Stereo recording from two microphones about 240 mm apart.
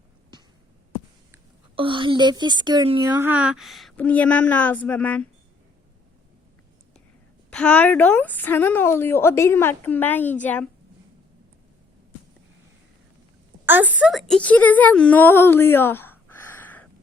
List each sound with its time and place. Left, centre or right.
1.7 s a woman's voice: right
3.2 s speech: centre
7.5 s a woman's voice: centre
13.7 s a woman's voice: centre